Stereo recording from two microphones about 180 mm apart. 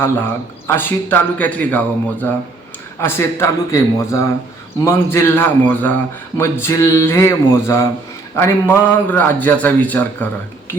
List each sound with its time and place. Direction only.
0.7 s a man's voice: 10° left (ahead or behind)